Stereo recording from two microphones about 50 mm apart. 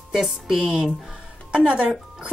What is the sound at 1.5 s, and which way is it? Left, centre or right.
Speech, right.